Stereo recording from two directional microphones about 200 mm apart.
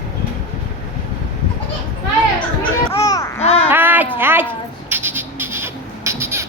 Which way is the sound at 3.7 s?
10° right (ahead or behind).